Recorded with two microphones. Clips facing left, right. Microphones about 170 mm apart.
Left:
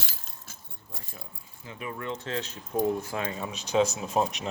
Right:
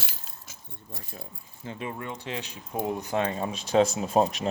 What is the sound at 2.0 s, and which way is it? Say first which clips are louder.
Speech: left 2 dB; 15° right (ahead or behind).